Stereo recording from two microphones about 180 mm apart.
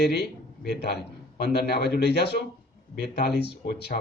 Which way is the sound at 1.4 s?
65° left (ahead or behind).